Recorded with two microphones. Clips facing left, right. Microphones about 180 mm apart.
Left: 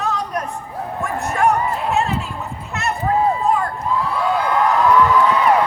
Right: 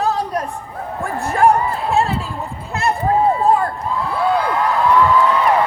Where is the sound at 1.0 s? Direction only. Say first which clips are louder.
Right 4 dB; 30° right (ahead or behind).